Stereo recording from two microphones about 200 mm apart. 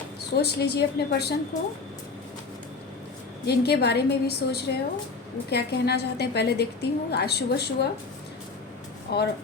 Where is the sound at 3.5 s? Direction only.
55° left (ahead or behind).